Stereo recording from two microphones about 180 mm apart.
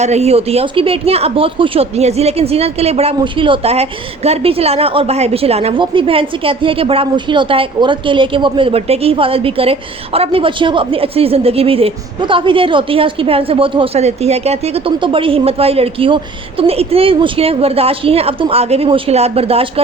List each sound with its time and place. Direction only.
0.0 s speech: 35° right (ahead or behind)